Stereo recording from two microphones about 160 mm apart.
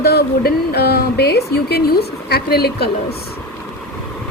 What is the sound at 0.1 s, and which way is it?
Speech, 85° left.